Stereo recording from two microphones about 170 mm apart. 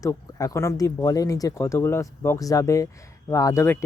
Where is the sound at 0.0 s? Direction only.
20° left (ahead or behind).